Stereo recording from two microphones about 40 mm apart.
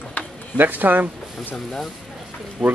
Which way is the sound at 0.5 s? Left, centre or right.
Right.